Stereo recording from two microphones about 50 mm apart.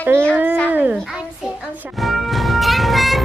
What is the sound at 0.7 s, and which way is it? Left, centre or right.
Speech, right.